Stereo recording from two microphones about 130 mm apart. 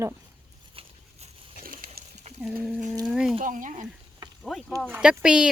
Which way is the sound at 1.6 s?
90° right.